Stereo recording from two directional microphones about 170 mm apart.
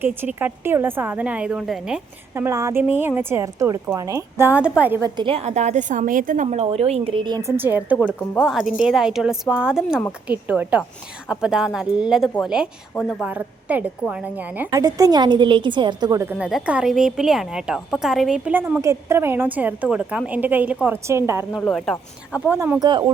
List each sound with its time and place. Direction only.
0.0 s a woman's voice: 10° right (ahead or behind)
2.3 s a woman's voice: 15° right (ahead or behind)
5.0 s a woman's voice: 30° right (ahead or behind)
7.5 s a woman's voice: 10° right (ahead or behind)
14.6 s a woman's voice: 20° right (ahead or behind)
16.4 s a woman's voice: 5° right (ahead or behind)
21.5 s speech: centre (ahead or behind)
22.4 s a woman's voice: 10° right (ahead or behind)